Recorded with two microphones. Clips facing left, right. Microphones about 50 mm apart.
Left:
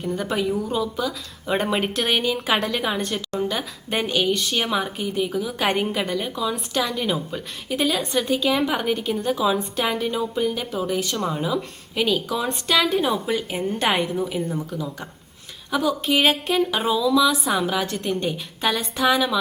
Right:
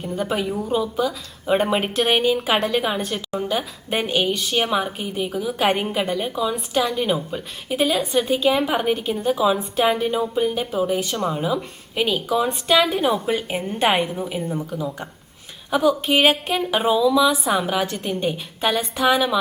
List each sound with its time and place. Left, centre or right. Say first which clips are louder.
0.0 s a woman's voice: even; centre